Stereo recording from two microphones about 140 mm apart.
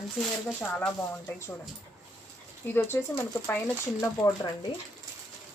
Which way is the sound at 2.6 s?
15° left (ahead or behind).